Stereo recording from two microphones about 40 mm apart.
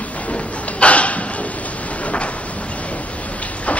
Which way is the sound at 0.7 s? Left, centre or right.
Left.